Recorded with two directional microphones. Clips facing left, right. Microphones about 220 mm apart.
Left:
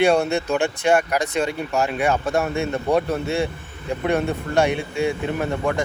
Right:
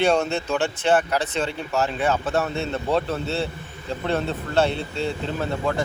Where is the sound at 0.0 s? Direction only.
10° left (ahead or behind).